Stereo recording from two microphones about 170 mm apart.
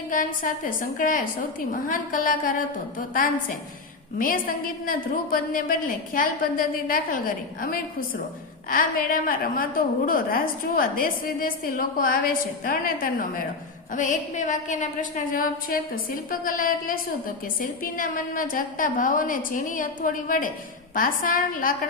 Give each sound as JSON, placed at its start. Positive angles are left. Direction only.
{"t": 0.1, "sound": "a woman's voice", "side_deg": 55}
{"t": 4.2, "sound": "a woman's voice", "side_deg": 55}